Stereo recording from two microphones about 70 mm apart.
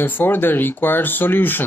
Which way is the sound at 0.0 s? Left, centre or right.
Left.